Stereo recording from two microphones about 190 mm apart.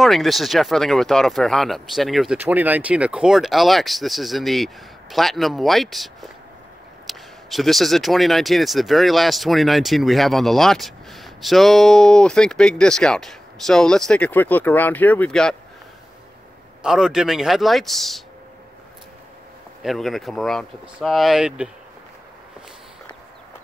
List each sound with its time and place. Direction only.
0.0 s speech: centre (ahead or behind)
16.8 s speech: 5° right (ahead or behind)
19.8 s speech: centre (ahead or behind)